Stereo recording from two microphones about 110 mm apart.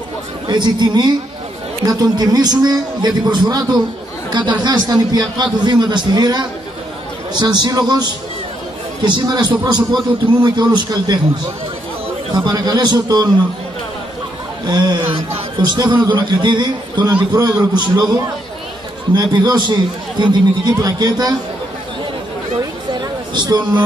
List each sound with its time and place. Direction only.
0.5 s a man's voice: 45° right (ahead or behind)
12.3 s a man's voice: 45° right (ahead or behind)
14.7 s speech: 45° right (ahead or behind)
17.1 s a man's voice: 15° right (ahead or behind)
17.7 s a man's voice: 40° right (ahead or behind)
22.6 s a sound: 45° right (ahead or behind)